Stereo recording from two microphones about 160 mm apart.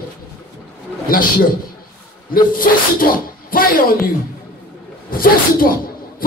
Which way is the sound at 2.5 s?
65° left (ahead or behind).